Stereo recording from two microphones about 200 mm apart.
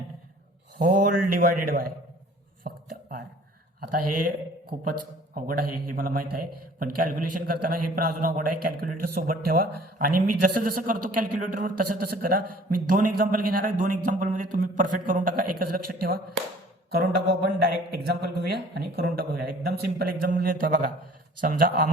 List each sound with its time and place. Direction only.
0.8 s speech: 40° right (ahead or behind)
2.7 s a sound: 45° right (ahead or behind)
3.8 s a man's voice: 45° right (ahead or behind)
18.0 s a man's voice: 55° right (ahead or behind)